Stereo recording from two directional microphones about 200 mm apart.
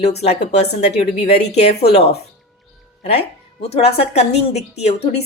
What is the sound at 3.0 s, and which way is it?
Speech, 30° left (ahead or behind).